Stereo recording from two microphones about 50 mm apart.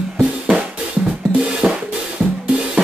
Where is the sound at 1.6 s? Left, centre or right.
Centre.